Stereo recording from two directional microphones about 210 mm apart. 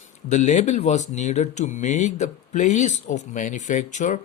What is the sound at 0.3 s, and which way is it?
Speech, 35° left (ahead or behind).